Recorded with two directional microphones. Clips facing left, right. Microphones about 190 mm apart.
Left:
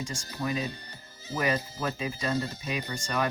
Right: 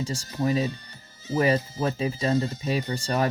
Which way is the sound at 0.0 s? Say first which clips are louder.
Right 6 dB; 35° right (ahead or behind).